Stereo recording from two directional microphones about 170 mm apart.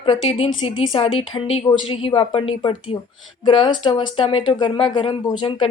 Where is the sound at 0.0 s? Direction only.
35° left (ahead or behind).